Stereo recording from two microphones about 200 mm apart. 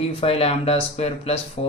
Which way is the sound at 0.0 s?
30° left (ahead or behind).